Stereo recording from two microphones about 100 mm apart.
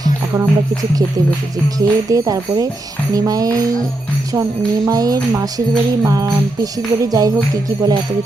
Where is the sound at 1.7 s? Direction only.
35° right (ahead or behind).